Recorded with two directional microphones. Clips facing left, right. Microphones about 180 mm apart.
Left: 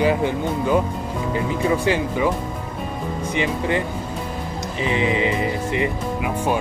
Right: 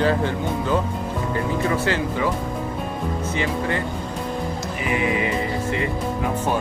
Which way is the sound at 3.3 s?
20° left (ahead or behind).